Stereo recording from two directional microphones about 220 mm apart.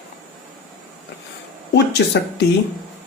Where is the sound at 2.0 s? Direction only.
55° left (ahead or behind).